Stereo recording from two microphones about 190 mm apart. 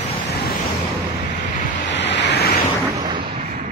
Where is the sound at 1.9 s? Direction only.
65° left (ahead or behind).